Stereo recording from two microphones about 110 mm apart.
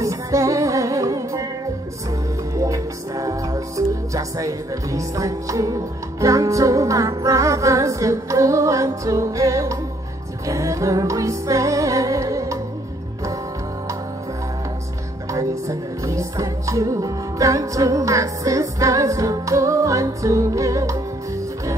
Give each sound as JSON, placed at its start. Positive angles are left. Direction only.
{"t": 0.0, "sound": "music", "side_deg": -30}
{"t": 2.5, "sound": "music", "side_deg": -30}
{"t": 15.3, "sound": "music", "side_deg": -30}